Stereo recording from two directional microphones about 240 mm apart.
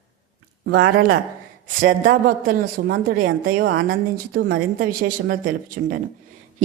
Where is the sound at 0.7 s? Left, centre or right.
Right.